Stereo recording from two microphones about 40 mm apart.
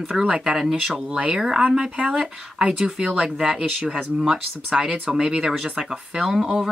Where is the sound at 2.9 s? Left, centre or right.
Centre.